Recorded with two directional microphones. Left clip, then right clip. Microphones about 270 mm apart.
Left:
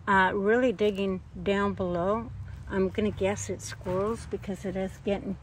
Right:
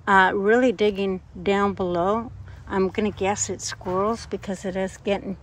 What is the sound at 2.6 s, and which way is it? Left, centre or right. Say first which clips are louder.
Speech: right 5 dB; right.